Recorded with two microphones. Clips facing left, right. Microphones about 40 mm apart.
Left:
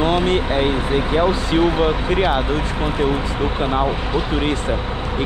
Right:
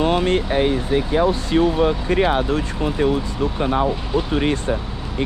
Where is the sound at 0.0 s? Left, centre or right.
Left.